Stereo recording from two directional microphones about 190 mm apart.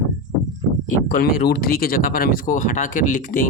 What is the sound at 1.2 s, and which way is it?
Speech, 50° left (ahead or behind).